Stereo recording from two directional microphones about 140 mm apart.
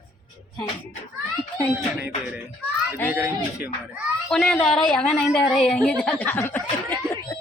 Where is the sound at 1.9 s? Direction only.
10° right (ahead or behind).